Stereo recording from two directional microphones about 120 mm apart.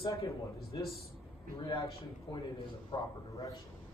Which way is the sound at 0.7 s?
40° left (ahead or behind).